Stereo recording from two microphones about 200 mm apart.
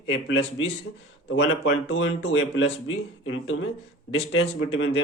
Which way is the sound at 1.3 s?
85° left.